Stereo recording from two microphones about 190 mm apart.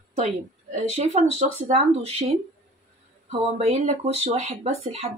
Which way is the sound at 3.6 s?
35° right (ahead or behind).